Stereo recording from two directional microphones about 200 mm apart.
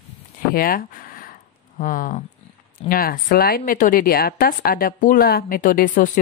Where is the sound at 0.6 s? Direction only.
45° left (ahead or behind).